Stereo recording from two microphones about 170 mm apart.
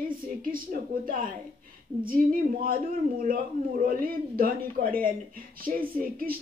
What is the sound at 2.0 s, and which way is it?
A man's voice, 55° right (ahead or behind).